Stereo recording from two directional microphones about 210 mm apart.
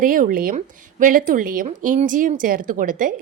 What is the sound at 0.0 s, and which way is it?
A woman's voice, 40° right (ahead or behind).